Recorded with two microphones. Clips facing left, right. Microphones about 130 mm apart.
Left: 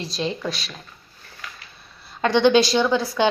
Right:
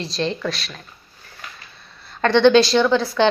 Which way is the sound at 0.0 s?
10° left (ahead or behind).